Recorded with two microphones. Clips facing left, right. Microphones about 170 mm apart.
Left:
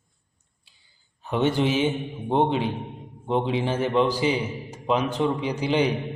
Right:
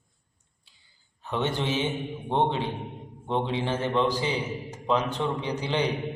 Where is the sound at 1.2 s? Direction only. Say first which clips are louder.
Left 6 dB; 10° left (ahead or behind).